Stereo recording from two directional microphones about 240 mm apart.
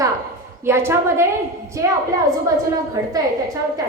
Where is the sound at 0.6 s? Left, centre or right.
Centre.